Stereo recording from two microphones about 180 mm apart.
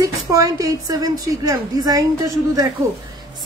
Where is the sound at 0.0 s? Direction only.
20° right (ahead or behind).